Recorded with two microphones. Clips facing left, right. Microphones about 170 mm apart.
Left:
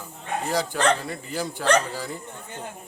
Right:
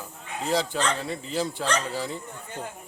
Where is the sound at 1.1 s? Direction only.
25° right (ahead or behind).